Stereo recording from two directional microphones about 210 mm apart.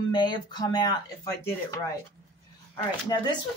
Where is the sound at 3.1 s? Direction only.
20° left (ahead or behind).